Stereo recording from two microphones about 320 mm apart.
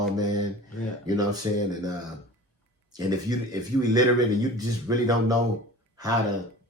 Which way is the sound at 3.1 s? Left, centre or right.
Centre.